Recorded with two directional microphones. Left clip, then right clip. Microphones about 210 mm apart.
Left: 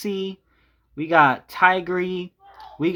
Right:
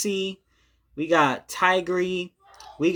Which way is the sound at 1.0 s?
20° left (ahead or behind).